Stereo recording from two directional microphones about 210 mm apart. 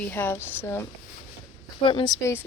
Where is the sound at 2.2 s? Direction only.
10° left (ahead or behind).